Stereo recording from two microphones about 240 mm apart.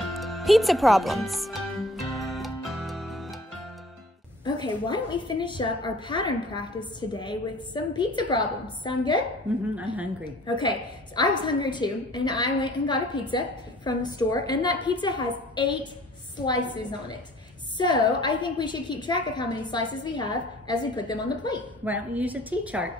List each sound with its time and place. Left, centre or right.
0.0 s music: centre
4.5 s a woman's voice: centre
10.4 s a woman's voice: centre
17.7 s a woman's voice: centre
21.8 s a woman's voice: centre